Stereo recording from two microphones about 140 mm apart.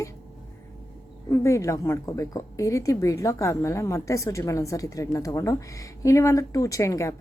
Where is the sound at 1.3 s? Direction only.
20° left (ahead or behind).